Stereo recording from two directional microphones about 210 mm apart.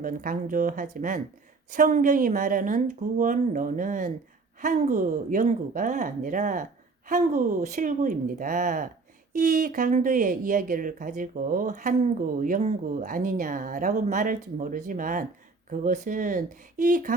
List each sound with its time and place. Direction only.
0.0 s speech: 40° right (ahead or behind)